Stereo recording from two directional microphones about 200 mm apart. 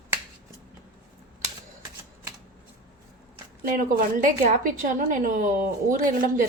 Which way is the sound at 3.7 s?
40° right (ahead or behind).